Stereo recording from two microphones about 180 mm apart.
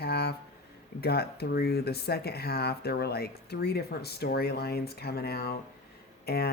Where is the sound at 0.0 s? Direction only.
65° left (ahead or behind).